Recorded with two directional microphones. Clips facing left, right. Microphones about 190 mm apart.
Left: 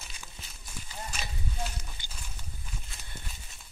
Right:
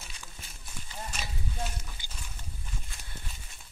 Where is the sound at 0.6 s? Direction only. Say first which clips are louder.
Even; centre (ahead or behind).